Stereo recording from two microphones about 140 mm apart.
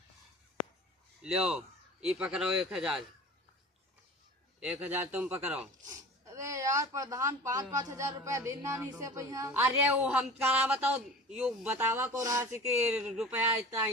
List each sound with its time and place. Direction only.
1.2 s speech: 5° right (ahead or behind)
4.6 s a man's voice: 10° right (ahead or behind)
5.8 s a man's voice: 25° right (ahead or behind)
12.9 s speech: 5° right (ahead or behind)